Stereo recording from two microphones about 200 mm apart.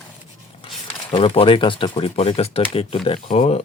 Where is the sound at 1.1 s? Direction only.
25° left (ahead or behind).